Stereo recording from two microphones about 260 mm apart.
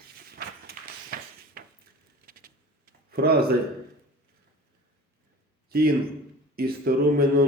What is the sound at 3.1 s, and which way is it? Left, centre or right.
Speech, right.